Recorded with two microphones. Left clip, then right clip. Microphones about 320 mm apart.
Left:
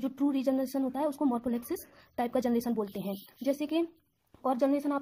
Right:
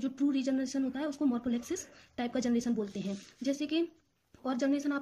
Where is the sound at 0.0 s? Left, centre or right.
Centre.